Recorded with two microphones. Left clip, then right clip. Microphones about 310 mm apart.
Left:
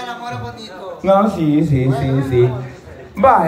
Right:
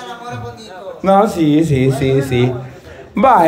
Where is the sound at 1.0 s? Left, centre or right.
Centre.